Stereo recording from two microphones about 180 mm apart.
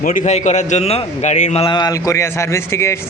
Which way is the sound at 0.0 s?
45° left (ahead or behind).